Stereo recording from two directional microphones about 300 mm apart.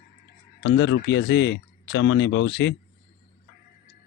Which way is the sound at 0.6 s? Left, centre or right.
Left.